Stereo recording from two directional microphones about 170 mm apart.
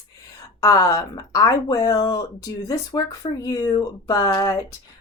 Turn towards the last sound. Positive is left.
turn(degrees=20)  # may be behind; listen again after turning